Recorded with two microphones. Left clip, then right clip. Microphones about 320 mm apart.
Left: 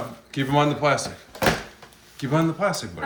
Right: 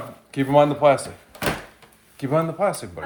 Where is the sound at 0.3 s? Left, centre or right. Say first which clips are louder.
Right 5 dB; centre.